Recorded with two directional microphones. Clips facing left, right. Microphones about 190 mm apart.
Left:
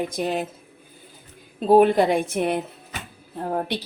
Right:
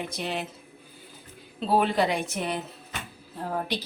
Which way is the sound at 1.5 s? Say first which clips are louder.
Left 8 dB; 50° left (ahead or behind).